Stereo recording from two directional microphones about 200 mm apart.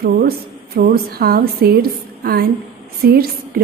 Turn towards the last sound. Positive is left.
turn(degrees=-50)  # may be behind; listen again after turning